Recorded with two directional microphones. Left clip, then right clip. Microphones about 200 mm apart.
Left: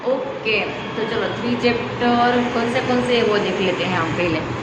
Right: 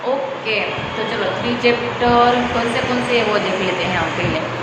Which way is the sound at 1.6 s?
20° left (ahead or behind).